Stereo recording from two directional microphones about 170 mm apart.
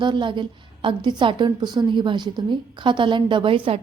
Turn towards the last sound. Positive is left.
turn(degrees=-30)  # may be behind; listen again after turning